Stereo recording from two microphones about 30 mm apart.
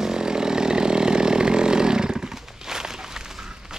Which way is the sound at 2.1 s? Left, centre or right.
Centre.